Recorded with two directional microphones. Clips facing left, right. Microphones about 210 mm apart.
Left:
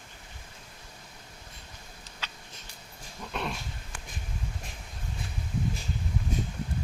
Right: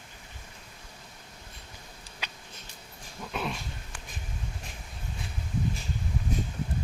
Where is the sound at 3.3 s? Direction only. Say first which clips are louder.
Right 1 dB; 5° right (ahead or behind).